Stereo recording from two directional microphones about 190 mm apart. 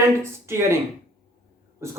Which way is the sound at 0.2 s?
15° right (ahead or behind).